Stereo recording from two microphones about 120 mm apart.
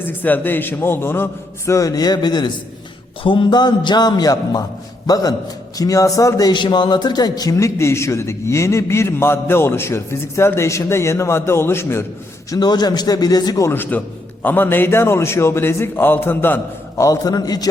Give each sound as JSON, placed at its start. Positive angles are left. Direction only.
{"t": 0.0, "sound": "a man's voice", "side_deg": 15}
{"t": 6.5, "sound": "a man's voice", "side_deg": 40}
{"t": 12.5, "sound": "a man's voice", "side_deg": 35}
{"t": 17.0, "sound": "a man's voice", "side_deg": 30}